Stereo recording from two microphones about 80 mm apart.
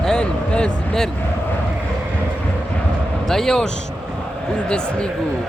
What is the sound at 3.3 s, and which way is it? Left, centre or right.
Speech, centre.